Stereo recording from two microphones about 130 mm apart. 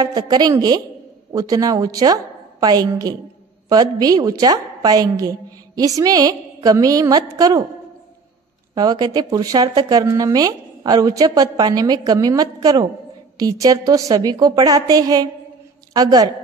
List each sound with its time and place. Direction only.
0.0 s a woman's voice: 30° right (ahead or behind)
8.7 s a woman's voice: 30° right (ahead or behind)